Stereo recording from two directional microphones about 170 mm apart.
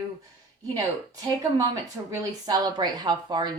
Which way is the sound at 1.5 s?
20° right (ahead or behind).